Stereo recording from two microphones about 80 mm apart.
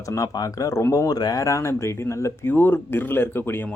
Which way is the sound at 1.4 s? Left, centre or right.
Left.